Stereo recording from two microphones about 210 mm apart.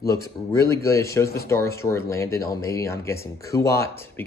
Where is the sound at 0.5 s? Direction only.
15° left (ahead or behind).